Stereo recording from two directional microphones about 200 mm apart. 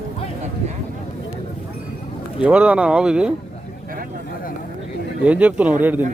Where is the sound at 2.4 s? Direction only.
5° right (ahead or behind).